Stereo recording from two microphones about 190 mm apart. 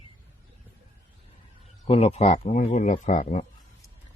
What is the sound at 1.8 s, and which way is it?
Speech, 30° left (ahead or behind).